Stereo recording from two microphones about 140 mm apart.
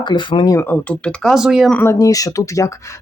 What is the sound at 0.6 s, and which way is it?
Speech, 10° left (ahead or behind).